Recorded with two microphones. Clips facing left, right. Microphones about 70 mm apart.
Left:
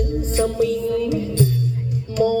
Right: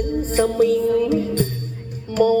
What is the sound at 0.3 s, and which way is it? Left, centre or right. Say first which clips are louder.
Music: right 3 dB; right.